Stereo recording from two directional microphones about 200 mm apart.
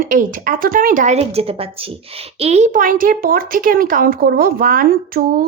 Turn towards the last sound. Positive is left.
turn(degrees=-45)  # may be behind; listen again after turning